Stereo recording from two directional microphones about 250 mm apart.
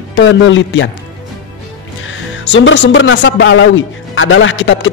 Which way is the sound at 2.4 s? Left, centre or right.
Left.